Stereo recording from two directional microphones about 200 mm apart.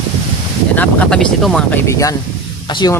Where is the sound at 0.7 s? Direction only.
10° left (ahead or behind).